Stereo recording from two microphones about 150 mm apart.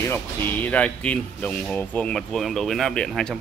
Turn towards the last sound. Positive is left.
turn(degrees=5)  # may be behind; listen again after turning